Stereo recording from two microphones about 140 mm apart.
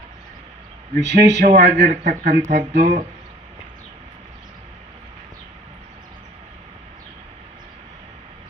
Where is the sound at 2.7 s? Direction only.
75° right (ahead or behind).